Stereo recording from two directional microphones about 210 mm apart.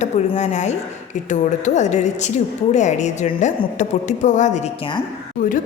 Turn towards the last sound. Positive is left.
turn(degrees=40)  # may be behind; listen again after turning